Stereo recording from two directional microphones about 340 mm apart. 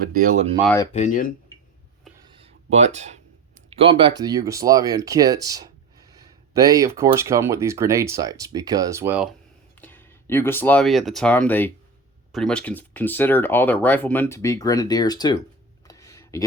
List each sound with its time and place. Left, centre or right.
0.0 s speech: right
0.6 s speech: centre
0.9 s speech: left
2.2 s a sound: centre
3.7 s speech: centre
9.8 s speech: centre
15.9 s a sound: centre